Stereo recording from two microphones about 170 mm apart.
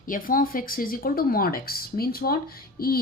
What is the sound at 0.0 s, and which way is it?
Speech, 55° left (ahead or behind).